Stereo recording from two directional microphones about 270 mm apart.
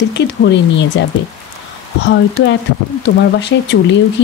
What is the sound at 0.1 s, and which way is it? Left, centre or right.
Speech, left.